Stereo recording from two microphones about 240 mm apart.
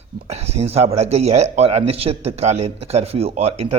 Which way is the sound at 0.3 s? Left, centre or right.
Right.